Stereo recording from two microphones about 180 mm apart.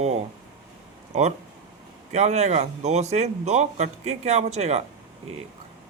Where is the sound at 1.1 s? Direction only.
40° right (ahead or behind).